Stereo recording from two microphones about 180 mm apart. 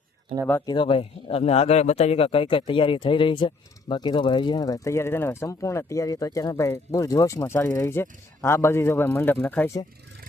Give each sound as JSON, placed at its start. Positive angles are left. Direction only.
{"t": 0.6, "sound": "a man's voice", "side_deg": 25}